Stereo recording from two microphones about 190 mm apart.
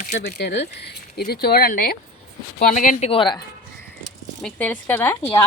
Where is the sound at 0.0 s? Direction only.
55° left (ahead or behind).